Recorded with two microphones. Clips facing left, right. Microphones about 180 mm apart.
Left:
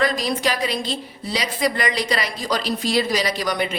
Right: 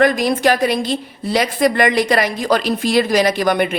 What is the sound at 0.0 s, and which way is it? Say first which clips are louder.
A woman's voice: right 7 dB; 55° right (ahead or behind).